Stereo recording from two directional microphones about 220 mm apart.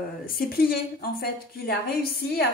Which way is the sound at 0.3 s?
45° left (ahead or behind).